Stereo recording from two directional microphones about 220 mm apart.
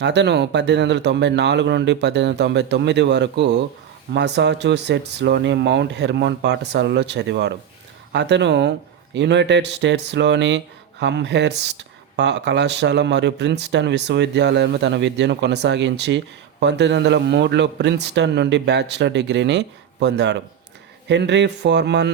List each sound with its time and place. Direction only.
0.0 s speech: 50° right (ahead or behind)